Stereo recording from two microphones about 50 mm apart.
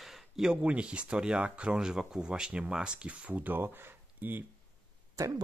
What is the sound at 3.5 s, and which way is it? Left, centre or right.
Speech, right.